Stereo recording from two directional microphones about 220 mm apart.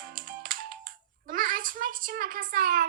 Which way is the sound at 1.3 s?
40° right (ahead or behind).